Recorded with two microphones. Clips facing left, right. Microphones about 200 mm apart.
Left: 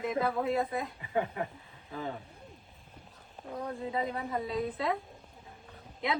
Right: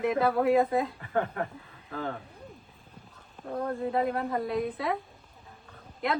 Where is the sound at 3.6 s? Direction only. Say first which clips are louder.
Right 6 dB; 60° right (ahead or behind).